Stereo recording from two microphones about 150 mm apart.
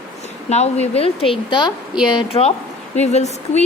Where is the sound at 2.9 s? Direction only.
45° left (ahead or behind).